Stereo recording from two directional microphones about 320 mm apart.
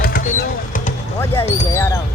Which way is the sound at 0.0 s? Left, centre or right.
Left.